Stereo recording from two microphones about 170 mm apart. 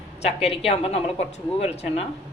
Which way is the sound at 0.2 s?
35° left (ahead or behind).